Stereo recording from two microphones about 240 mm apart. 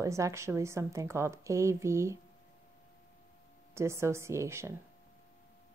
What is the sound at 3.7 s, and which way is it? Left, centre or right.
A woman's voice, centre.